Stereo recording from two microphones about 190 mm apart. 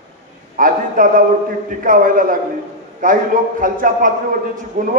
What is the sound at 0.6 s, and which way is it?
A man's voice, 45° right (ahead or behind).